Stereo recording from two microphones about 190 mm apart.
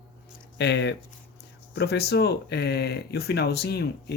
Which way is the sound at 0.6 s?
65° left (ahead or behind).